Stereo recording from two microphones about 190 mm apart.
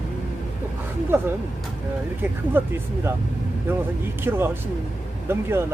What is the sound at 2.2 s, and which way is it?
Speech, 10° right (ahead or behind).